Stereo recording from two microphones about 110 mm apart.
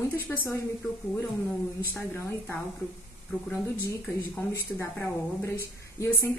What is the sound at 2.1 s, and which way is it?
Speech, 20° left (ahead or behind).